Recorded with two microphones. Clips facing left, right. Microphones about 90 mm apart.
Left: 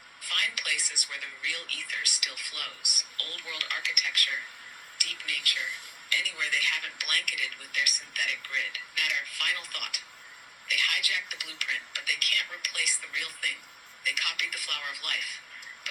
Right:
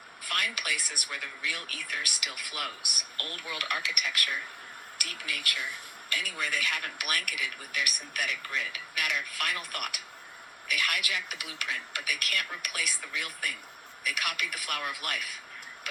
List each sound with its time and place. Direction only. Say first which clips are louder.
0.3 s speech: right 2 dB; 40° right (ahead or behind)